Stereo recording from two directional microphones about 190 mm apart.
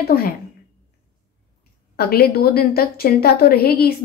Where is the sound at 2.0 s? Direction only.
55° left (ahead or behind).